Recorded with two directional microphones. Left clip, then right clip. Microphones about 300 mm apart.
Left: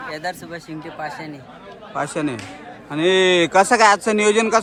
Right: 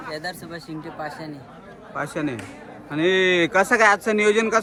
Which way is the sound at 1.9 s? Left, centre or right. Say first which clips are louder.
Left 4 dB; centre.